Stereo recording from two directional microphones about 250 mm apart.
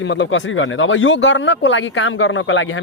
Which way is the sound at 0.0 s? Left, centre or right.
Left.